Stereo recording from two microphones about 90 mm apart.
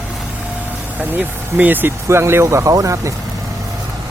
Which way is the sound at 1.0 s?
20° right (ahead or behind).